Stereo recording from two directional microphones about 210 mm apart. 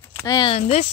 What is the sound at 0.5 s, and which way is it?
Speech, 30° left (ahead or behind).